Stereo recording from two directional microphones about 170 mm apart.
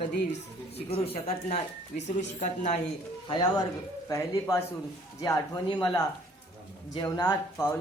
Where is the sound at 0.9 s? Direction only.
35° left (ahead or behind).